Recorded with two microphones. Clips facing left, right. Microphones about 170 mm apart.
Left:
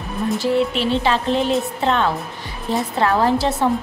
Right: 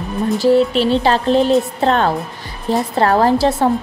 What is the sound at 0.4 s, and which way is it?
A woman's voice, 35° right (ahead or behind).